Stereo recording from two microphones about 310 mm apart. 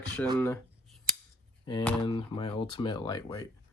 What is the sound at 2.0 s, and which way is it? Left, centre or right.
Speech, centre.